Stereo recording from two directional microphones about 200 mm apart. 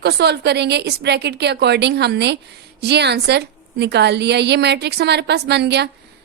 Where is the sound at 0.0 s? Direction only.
55° right (ahead or behind).